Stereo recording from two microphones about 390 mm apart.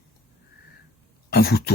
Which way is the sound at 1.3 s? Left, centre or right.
Left.